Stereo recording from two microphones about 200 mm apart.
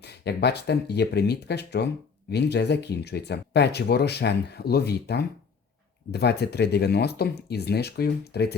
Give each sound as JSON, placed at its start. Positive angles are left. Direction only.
{"t": 0.0, "sound": "speech", "side_deg": 55}